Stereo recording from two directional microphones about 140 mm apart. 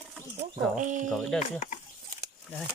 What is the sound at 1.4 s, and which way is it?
Speech, 55° left (ahead or behind).